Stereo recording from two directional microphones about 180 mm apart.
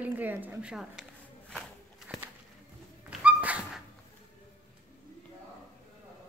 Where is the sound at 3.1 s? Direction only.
5° right (ahead or behind).